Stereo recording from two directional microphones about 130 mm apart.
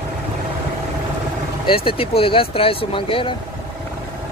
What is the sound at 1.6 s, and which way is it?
Speech, 45° left (ahead or behind).